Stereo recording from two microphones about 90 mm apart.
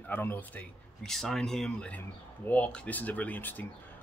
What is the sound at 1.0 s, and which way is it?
Speech, 5° left (ahead or behind).